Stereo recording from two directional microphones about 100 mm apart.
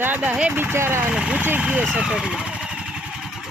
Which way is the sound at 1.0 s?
10° right (ahead or behind).